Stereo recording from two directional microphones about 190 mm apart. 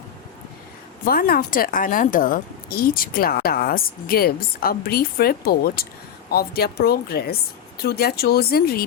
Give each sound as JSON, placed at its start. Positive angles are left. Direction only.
{"t": 1.0, "sound": "speech", "side_deg": 50}